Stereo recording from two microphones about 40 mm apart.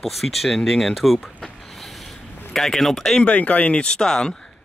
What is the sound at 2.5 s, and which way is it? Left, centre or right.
Speech, centre.